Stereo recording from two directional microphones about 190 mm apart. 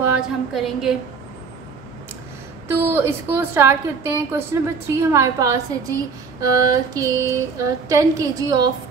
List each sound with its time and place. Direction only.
0.1 s a woman's voice: 5° right (ahead or behind)
2.7 s a woman's voice: 10° right (ahead or behind)